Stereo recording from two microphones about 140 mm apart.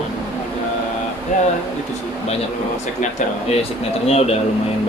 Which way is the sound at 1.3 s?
70° left (ahead or behind).